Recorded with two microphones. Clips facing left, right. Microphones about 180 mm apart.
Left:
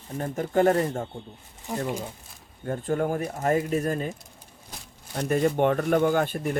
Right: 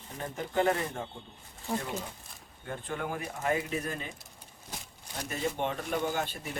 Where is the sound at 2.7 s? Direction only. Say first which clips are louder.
Left 10 dB; 45° left (ahead or behind).